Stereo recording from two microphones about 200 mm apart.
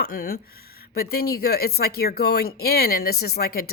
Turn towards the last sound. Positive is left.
turn(degrees=50)  # may be behind; listen again after turning